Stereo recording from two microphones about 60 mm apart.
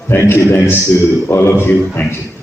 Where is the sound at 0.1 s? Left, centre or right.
Left.